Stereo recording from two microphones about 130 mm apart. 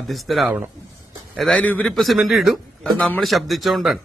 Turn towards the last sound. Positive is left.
turn(degrees=0)  # may be behind; listen again after turning